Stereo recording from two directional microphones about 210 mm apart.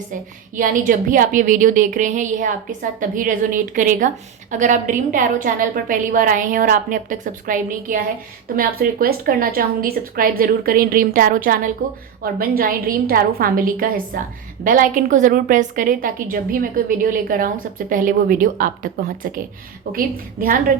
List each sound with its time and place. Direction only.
0.1 s a woman's voice: 40° right (ahead or behind)
20.4 s a woman's voice: 45° right (ahead or behind)